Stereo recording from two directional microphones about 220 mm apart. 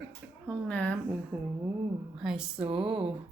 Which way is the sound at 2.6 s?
25° right (ahead or behind).